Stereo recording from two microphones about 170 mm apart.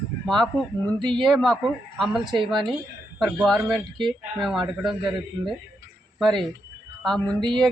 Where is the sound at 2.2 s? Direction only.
25° right (ahead or behind).